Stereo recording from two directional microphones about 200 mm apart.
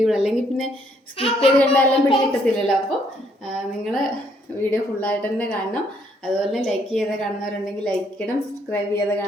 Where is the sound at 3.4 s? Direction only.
Centre (ahead or behind).